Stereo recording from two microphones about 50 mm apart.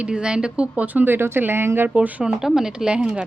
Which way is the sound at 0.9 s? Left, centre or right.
Right.